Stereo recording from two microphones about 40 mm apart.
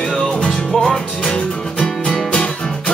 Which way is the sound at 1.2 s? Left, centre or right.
Left.